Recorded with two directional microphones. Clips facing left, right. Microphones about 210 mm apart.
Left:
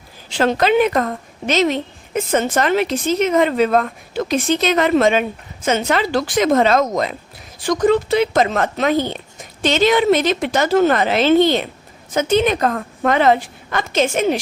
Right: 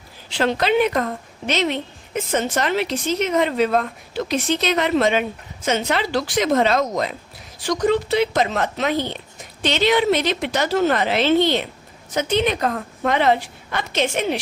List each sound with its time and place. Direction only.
0.3 s a woman's voice: 45° left (ahead or behind)